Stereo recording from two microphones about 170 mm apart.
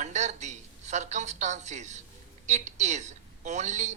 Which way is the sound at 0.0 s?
45° right (ahead or behind).